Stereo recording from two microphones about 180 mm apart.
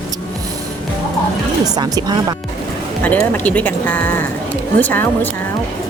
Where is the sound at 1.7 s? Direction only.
20° right (ahead or behind).